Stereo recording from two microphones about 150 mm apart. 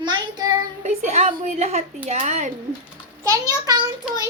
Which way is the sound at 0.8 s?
45° right (ahead or behind).